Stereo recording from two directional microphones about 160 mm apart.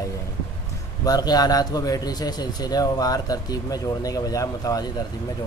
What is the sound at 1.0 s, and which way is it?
A man's voice, 25° left (ahead or behind).